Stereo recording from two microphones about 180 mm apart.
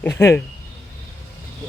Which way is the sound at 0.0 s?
15° left (ahead or behind).